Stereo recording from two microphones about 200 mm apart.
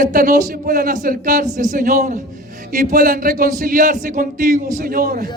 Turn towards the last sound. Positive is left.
turn(degrees=-45)  # may be behind; listen again after turning